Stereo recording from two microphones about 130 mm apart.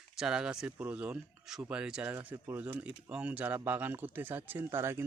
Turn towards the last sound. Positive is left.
turn(degrees=-20)  # may be behind; listen again after turning